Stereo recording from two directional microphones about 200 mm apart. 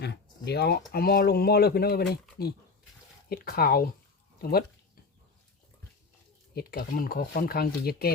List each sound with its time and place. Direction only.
0.0 s speech: 55° left (ahead or behind)
6.5 s speech: 50° left (ahead or behind)